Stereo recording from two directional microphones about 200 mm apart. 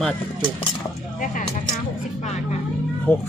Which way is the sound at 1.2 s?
40° left (ahead or behind).